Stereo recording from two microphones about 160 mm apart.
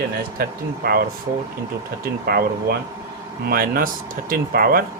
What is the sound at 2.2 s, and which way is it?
Speech, 70° right (ahead or behind).